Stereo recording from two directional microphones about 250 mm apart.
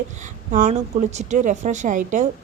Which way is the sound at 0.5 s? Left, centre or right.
Right.